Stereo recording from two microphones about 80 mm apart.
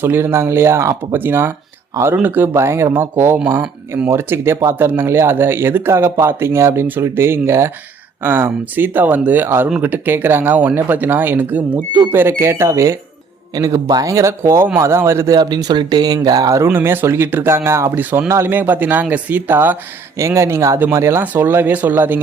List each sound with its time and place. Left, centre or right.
0.0 s speech: right
3.6 s speech: centre
4.1 s speech: right
13.5 s speech: right
15.3 s speech: right
16.6 s speech: right
18.0 s speech: right
18.3 s speech: right
18.5 s speech: right
20.1 s speech: right